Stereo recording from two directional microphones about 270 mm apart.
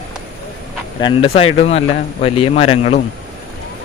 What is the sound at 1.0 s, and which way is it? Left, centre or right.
A man's voice, left.